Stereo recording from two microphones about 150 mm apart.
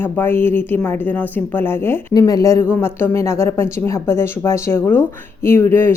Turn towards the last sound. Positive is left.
turn(degrees=15)  # may be behind; listen again after turning